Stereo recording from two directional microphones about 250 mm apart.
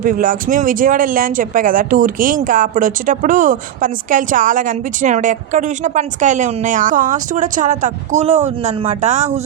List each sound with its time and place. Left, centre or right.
0.0 s speech: right